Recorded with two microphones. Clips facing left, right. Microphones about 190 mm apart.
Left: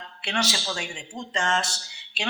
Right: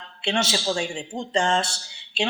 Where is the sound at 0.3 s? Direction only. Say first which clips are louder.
Right 5 dB; 25° right (ahead or behind).